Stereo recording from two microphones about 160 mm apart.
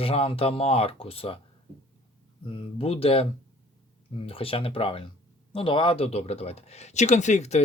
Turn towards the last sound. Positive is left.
turn(degrees=45)  # may be behind; listen again after turning